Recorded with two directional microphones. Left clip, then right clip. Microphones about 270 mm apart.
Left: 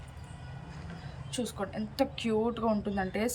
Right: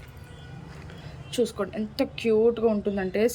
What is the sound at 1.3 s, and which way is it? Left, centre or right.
A woman's voice, centre.